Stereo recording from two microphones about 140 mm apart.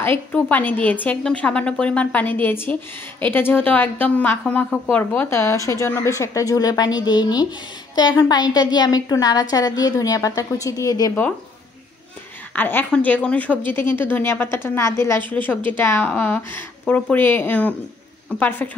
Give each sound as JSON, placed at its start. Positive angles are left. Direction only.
{"t": 0.0, "sound": "a woman's voice", "side_deg": 15}
{"t": 12.5, "sound": "a woman's voice", "side_deg": 15}